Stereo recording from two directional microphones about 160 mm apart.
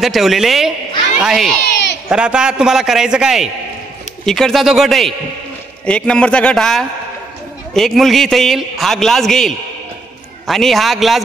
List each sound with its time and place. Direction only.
0.0 s a man's voice: centre (ahead or behind)
1.6 s baby cry: 90° left
2.0 s a man's voice: 5° right (ahead or behind)